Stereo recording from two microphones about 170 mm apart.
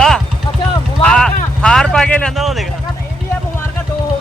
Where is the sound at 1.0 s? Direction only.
5° left (ahead or behind).